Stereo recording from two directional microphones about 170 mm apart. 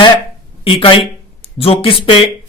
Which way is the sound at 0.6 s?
30° left (ahead or behind).